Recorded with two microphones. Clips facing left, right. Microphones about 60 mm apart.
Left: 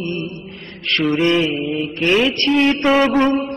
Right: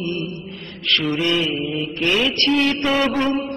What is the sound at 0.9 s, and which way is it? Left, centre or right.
Mantra, left.